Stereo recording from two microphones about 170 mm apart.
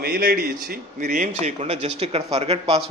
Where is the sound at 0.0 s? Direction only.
60° right (ahead or behind).